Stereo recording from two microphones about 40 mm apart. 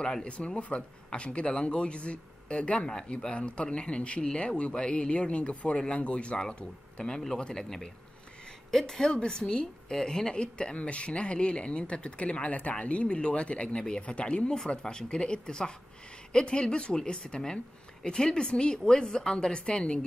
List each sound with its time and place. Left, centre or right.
0.0 s a woman's voice: left
7.0 s a woman's voice: centre